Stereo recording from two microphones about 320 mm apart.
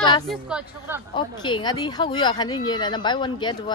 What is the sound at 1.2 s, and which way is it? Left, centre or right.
A woman's voice, centre.